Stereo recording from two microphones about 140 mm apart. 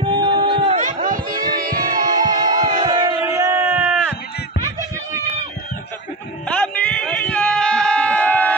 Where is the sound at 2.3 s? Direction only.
30° right (ahead or behind).